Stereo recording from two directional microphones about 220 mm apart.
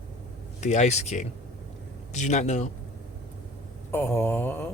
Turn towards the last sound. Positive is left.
turn(degrees=10)  # may be behind; listen again after turning